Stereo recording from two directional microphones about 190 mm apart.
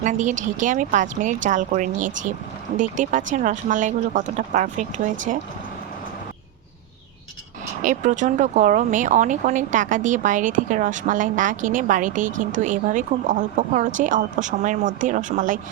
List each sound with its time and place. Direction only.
0.0 s speech: 40° right (ahead or behind)
7.9 s speech: 40° right (ahead or behind)